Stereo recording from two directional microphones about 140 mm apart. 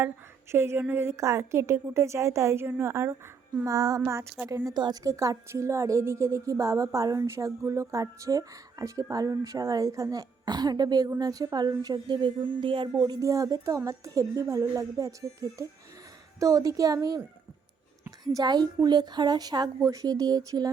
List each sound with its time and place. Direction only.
0.5 s a woman's voice: 20° right (ahead or behind)
18.3 s a woman's voice: 30° right (ahead or behind)